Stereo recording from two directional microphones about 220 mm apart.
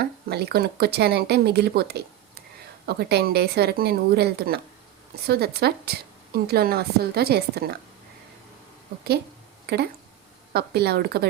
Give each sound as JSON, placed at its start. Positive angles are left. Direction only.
{"t": 0.3, "sound": "a woman's voice", "side_deg": -45}
{"t": 9.7, "sound": "a woman's voice", "side_deg": -45}